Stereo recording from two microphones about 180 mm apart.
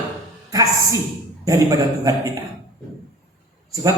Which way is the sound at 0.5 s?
20° right (ahead or behind).